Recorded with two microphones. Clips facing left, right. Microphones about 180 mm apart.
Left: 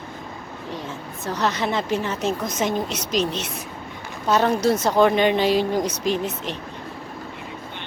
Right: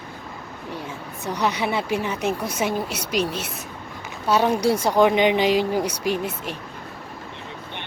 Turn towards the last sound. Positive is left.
turn(degrees=-10)  # may be behind; listen again after turning